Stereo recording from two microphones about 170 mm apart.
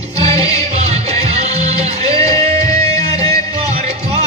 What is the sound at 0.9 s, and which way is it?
Music, 40° right (ahead or behind).